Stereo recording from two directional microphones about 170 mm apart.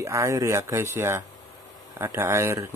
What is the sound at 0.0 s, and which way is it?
Speech, 15° right (ahead or behind).